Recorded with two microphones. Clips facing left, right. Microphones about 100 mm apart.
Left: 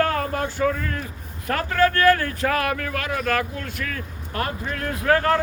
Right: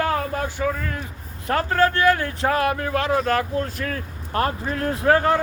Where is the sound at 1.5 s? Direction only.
30° right (ahead or behind).